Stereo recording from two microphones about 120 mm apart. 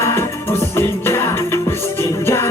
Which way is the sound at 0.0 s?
20° left (ahead or behind).